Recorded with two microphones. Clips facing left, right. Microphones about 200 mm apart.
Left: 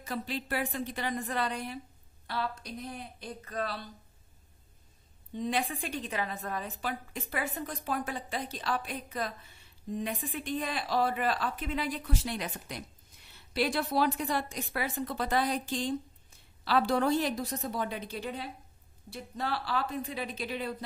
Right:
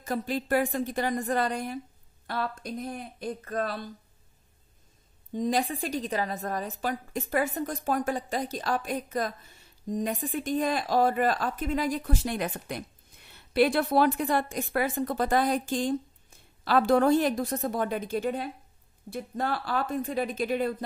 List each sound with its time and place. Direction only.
0.0 s a woman's voice: 45° right (ahead or behind)
5.3 s a woman's voice: 40° right (ahead or behind)